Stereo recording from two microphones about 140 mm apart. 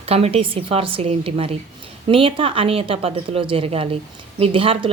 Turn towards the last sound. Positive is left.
turn(degrees=-40)  # may be behind; listen again after turning